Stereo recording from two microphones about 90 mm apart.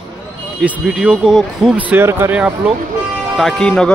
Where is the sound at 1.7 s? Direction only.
15° right (ahead or behind).